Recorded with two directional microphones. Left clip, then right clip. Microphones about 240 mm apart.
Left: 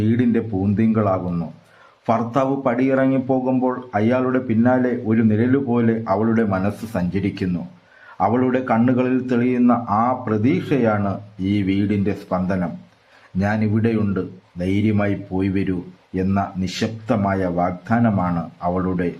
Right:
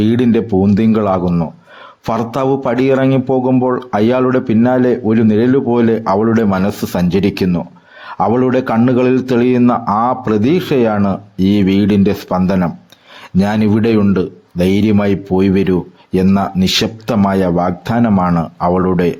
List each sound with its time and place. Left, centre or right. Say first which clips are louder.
0.0 s speech: right 7 dB; right